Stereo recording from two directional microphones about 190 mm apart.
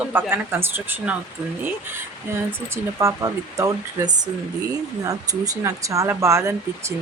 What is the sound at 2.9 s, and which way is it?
Speech, 15° right (ahead or behind).